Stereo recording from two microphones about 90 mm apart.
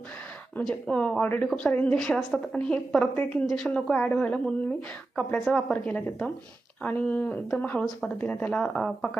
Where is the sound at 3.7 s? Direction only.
10° left (ahead or behind).